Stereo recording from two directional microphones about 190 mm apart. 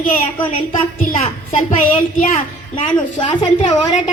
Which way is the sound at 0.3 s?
30° left (ahead or behind).